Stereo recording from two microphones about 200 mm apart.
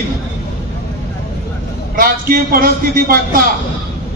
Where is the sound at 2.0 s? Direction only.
45° right (ahead or behind).